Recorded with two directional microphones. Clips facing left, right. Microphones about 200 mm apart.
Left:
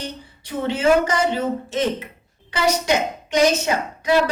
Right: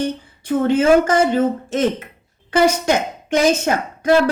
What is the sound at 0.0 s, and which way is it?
A woman's voice, 50° right (ahead or behind).